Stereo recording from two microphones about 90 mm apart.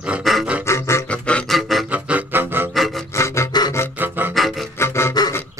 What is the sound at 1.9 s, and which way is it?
Music, 15° right (ahead or behind).